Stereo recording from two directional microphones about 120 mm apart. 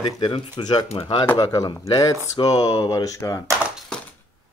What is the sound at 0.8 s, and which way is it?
Speech, 50° left (ahead or behind).